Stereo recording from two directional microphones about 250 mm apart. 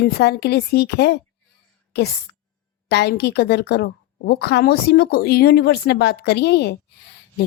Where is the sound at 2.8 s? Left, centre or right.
Left.